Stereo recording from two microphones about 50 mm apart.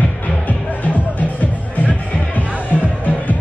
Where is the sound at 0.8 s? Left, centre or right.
Left.